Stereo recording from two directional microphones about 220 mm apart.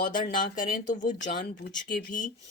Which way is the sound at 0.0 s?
35° left (ahead or behind).